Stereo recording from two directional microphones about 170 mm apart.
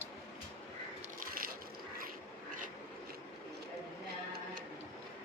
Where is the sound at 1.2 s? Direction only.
60° right (ahead or behind).